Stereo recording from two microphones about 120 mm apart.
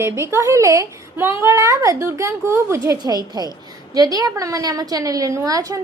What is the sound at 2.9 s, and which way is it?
A woman's voice, 35° right (ahead or behind).